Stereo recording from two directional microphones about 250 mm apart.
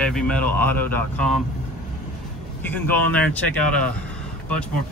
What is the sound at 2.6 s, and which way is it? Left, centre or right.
Speech, centre.